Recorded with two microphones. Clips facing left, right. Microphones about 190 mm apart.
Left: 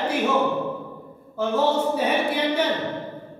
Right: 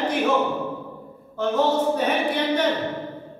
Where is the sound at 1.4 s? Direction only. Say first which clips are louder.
Right 1 dB; 10° left (ahead or behind).